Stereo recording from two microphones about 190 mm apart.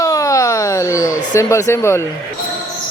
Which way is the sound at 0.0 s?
15° left (ahead or behind).